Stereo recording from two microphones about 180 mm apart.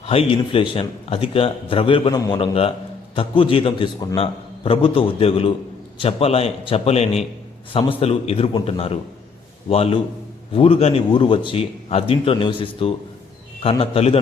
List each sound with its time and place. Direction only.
0.0 s a man's voice: 30° left (ahead or behind)